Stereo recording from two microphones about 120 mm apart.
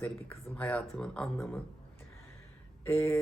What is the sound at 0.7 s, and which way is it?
Speech, 5° left (ahead or behind).